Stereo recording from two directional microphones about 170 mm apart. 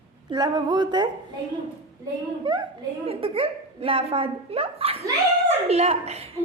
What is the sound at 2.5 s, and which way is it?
Speech, 30° right (ahead or behind).